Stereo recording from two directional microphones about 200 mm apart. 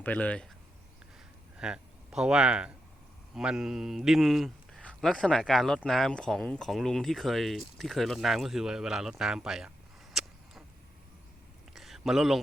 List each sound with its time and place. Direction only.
0.0 s speech: 5° left (ahead or behind)
1.5 s speech: 5° right (ahead or behind)
11.7 s a sound: centre (ahead or behind)